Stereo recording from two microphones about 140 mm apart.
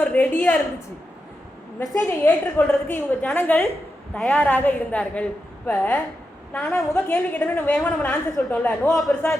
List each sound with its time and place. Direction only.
0.0 s a woman's voice: 10° left (ahead or behind)
1.8 s a woman's voice: 25° left (ahead or behind)
7.8 s a woman's voice: 5° left (ahead or behind)